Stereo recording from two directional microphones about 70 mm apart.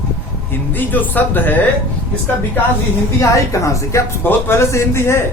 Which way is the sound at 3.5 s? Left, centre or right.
Left.